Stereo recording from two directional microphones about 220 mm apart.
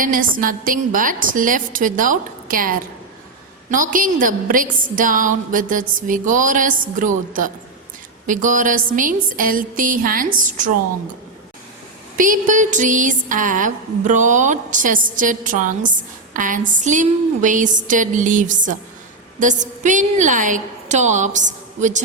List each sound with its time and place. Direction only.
0.0 s a woman's voice: 40° right (ahead or behind)
12.1 s a woman's voice: 35° right (ahead or behind)